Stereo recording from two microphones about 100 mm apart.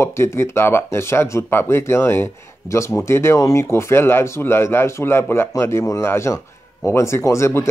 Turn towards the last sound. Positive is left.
turn(degrees=30)  # may be behind; listen again after turning